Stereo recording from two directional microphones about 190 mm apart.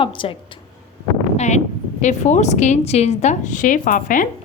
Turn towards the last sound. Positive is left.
turn(degrees=45)  # may be behind; listen again after turning